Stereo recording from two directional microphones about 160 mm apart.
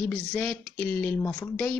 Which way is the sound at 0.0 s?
5° left (ahead or behind).